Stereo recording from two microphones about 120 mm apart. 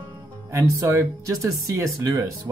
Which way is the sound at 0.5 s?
25° right (ahead or behind).